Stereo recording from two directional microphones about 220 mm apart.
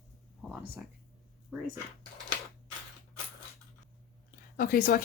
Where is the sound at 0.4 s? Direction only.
5° right (ahead or behind).